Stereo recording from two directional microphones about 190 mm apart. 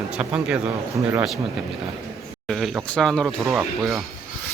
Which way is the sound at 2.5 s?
Centre (ahead or behind).